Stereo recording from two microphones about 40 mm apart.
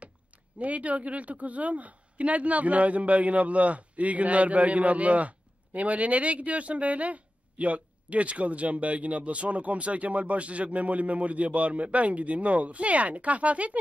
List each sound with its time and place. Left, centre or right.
0.6 s a woman's voice: right